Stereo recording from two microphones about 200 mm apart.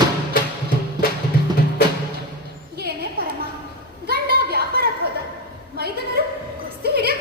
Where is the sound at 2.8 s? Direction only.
50° right (ahead or behind).